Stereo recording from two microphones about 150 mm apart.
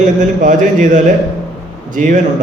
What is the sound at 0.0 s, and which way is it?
A man's voice, 55° right (ahead or behind).